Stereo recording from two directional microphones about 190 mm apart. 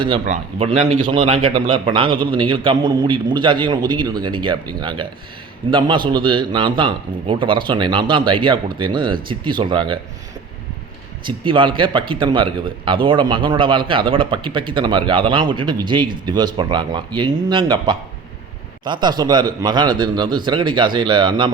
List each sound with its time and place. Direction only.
0.6 s speech: 35° right (ahead or behind)
6.1 s speech: 25° right (ahead or behind)
11.3 s speech: 25° right (ahead or behind)